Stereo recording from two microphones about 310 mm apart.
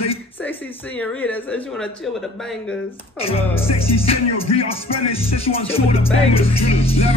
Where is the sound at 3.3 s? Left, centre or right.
Centre.